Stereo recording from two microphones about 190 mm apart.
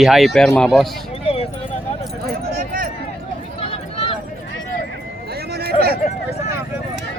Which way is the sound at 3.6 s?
30° left (ahead or behind).